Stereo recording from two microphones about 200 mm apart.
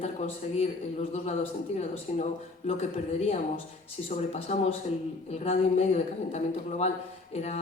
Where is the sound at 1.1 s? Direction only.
35° left (ahead or behind).